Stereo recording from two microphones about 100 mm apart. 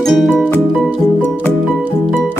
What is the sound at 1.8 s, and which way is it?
Music, 15° right (ahead or behind).